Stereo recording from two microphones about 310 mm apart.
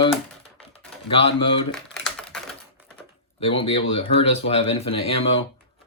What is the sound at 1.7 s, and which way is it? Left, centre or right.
Typing, centre.